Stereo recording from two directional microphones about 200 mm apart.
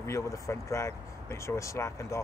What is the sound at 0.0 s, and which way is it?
Speech, 15° left (ahead or behind).